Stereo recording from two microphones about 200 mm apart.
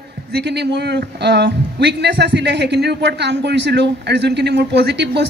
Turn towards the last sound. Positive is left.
turn(degrees=-55)  # may be behind; listen again after turning